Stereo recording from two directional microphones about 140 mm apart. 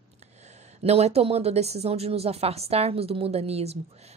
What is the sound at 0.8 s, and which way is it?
A woman's voice, 50° right (ahead or behind).